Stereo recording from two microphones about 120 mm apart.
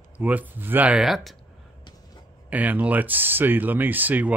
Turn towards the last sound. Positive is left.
turn(degrees=-15)  # may be behind; listen again after turning